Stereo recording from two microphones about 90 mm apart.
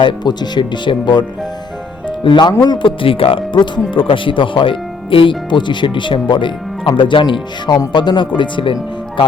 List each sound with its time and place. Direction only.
0.0 s speech: 55° left (ahead or behind)
2.2 s speech: 60° left (ahead or behind)